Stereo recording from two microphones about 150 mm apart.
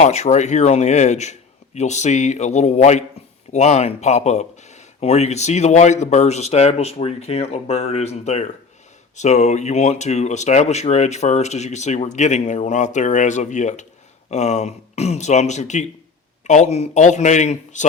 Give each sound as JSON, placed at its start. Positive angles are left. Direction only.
{"t": 0.0, "sound": "speech", "side_deg": 50}